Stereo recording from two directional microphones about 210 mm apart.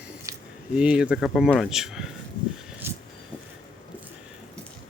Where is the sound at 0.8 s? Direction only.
5° right (ahead or behind).